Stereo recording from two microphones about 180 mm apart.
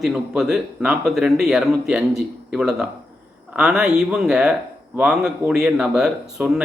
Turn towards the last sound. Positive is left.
turn(degrees=-5)  # may be behind; listen again after turning